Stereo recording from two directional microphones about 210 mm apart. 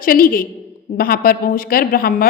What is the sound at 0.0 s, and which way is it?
A woman's voice, 45° left (ahead or behind).